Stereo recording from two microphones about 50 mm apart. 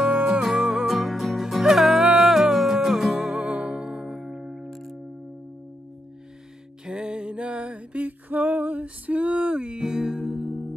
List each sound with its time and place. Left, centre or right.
0.0 s music: centre
3.4 s music: right
4.6 s music: centre
6.9 s music: centre